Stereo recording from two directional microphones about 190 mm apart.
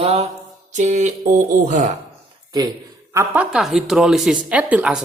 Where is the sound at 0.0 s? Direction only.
35° right (ahead or behind).